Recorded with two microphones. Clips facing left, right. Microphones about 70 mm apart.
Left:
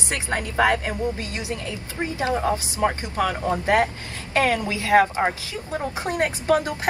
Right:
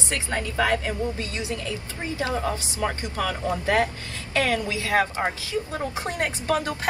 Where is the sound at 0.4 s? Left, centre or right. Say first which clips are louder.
Left 3 dB; left.